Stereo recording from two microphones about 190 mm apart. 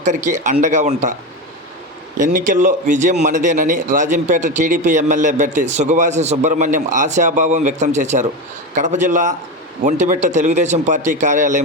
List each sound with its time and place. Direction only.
0.0 s a man's voice: 40° right (ahead or behind)
2.1 s a man's voice: 45° right (ahead or behind)